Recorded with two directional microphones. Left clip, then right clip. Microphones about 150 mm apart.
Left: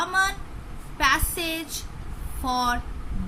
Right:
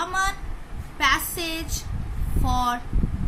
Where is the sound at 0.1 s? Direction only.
25° left (ahead or behind).